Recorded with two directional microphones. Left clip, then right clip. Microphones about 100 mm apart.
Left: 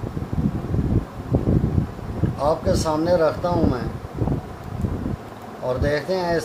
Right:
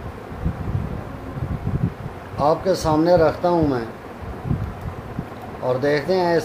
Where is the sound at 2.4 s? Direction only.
80° right.